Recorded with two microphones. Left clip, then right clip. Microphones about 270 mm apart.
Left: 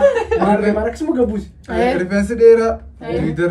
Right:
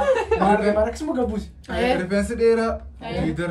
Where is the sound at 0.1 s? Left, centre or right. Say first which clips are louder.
Left 3 dB; left.